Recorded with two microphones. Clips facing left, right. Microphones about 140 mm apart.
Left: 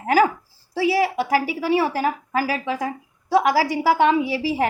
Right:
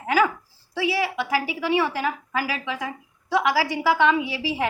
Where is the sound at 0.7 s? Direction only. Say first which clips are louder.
Left 5 dB; 40° left (ahead or behind).